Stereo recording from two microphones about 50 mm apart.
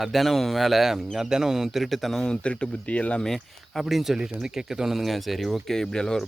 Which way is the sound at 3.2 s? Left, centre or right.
Centre.